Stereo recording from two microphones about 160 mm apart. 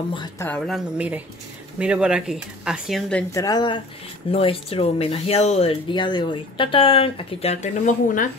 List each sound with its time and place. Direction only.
0.4 s speech: 10° left (ahead or behind)
0.7 s speech: 5° right (ahead or behind)
3.3 s speech: 25° left (ahead or behind); by 8.3 s 55° left (ahead or behind)